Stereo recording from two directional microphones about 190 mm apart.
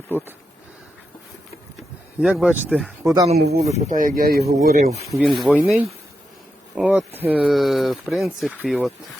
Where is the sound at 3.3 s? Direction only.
55° right (ahead or behind).